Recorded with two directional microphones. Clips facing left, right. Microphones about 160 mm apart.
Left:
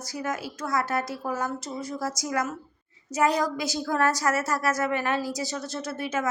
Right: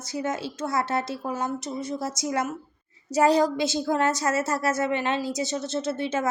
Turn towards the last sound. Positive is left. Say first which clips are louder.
# right 3 dB
turn(degrees=-30)  # may be behind; listen again after turning